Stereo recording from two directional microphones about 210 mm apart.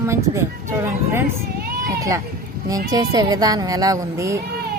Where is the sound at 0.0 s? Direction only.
15° right (ahead or behind).